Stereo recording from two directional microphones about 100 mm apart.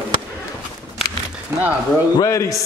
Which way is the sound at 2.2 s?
30° left (ahead or behind).